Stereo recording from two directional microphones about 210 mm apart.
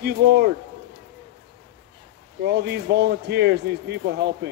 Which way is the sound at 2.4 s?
50° right (ahead or behind).